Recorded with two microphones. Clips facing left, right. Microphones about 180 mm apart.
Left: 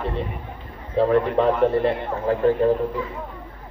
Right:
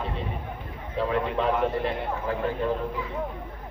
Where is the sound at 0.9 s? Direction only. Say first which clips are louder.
Left 8 dB; 50° left (ahead or behind).